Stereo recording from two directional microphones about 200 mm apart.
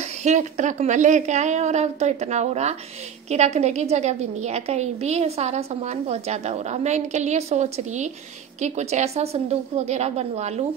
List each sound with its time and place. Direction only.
0.2 s a woman's voice: 35° right (ahead or behind)